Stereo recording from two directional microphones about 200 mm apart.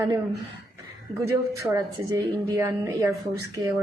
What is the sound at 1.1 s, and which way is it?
A woman's voice, 20° right (ahead or behind).